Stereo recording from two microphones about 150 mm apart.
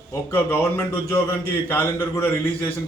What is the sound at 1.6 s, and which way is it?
A man's voice, 15° left (ahead or behind).